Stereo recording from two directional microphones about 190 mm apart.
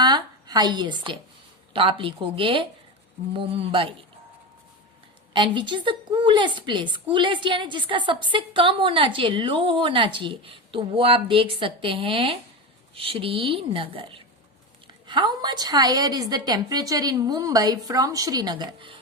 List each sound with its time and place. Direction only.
0.0 s a sound: 20° right (ahead or behind)
1.7 s a woman's voice: 25° right (ahead or behind)
5.3 s a woman's voice: 25° right (ahead or behind)